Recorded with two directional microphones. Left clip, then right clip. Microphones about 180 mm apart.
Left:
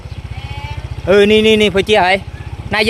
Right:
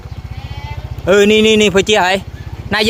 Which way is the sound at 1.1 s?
20° right (ahead or behind).